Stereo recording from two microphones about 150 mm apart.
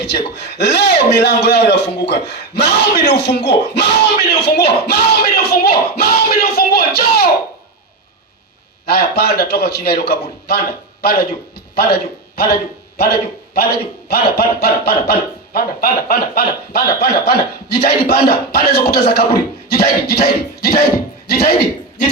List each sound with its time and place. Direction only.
0.0 s a man's voice: 90° left
8.9 s speech: 90° left
13.0 s a man's voice: 90° left